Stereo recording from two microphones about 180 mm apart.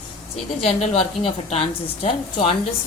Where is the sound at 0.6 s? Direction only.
30° left (ahead or behind).